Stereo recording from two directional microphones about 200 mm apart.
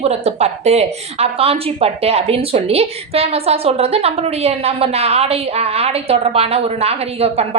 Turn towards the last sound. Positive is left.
turn(degrees=-30)  # may be behind; listen again after turning